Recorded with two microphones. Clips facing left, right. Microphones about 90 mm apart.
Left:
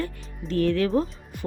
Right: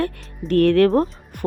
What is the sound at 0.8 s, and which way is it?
Speech, 45° right (ahead or behind).